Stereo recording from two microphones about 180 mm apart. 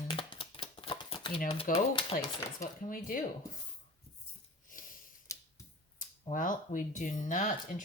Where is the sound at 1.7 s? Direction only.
30° left (ahead or behind).